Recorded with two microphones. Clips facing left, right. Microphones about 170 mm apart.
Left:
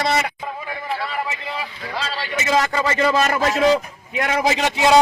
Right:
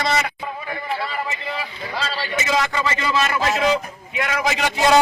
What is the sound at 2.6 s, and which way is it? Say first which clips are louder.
A man's voice: left 3 dB; 40° left (ahead or behind).